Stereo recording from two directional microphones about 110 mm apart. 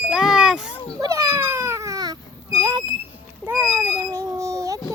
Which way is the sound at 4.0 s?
30° right (ahead or behind).